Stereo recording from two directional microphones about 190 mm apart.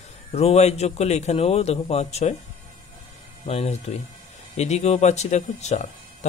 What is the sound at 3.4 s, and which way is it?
Speech, 35° left (ahead or behind).